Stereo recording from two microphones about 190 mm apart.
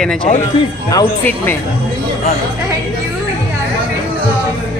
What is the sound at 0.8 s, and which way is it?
Speech, 15° left (ahead or behind).